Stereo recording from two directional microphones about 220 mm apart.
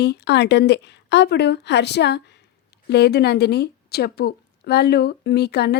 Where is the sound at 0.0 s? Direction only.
50° left (ahead or behind).